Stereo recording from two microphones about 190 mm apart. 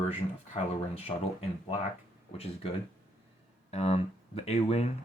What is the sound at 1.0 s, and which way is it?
Speech, 30° left (ahead or behind).